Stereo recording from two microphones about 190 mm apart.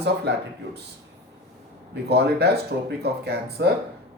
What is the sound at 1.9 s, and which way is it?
Speech, 60° right (ahead or behind).